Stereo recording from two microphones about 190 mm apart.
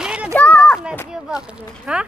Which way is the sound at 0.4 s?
10° left (ahead or behind).